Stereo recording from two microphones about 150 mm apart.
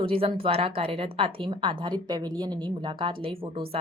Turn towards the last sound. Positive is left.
turn(degrees=-40)  # may be behind; listen again after turning